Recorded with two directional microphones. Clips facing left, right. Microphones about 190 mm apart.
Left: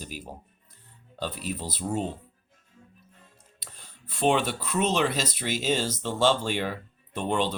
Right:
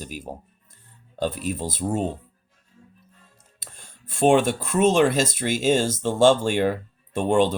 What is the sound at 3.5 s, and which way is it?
Speech, 50° right (ahead or behind).